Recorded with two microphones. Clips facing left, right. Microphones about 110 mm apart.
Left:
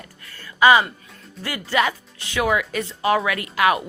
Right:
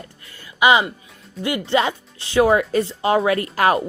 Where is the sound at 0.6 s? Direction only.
20° right (ahead or behind).